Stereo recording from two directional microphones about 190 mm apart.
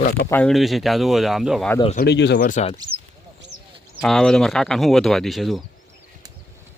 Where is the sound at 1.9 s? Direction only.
60° left (ahead or behind); by 2.8 s 35° left (ahead or behind).